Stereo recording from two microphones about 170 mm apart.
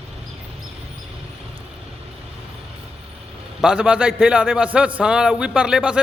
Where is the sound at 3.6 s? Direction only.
5° right (ahead or behind).